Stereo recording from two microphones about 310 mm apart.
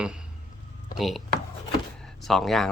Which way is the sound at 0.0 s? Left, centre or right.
Centre.